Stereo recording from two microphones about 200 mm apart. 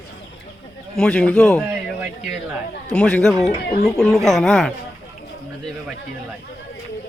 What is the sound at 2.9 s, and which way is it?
Speech, 5° left (ahead or behind).